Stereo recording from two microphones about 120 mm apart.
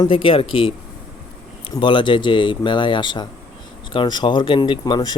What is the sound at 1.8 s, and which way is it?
Speech, 45° left (ahead or behind).